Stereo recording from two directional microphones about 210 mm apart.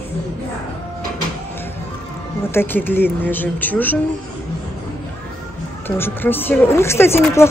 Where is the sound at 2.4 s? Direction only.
10° left (ahead or behind).